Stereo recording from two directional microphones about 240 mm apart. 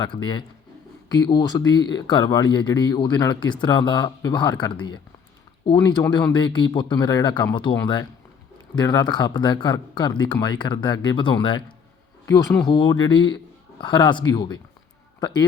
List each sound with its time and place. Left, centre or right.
0.0 s a man's voice: centre